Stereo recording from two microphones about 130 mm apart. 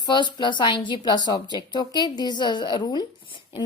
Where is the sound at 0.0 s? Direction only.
35° left (ahead or behind).